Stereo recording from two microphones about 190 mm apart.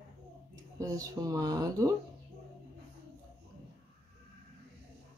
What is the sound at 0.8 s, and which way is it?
Speech, 15° right (ahead or behind).